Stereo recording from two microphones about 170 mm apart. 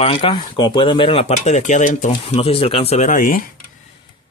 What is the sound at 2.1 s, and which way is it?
Speech, 35° left (ahead or behind).